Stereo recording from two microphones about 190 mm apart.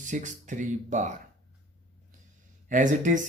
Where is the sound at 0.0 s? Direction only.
40° right (ahead or behind).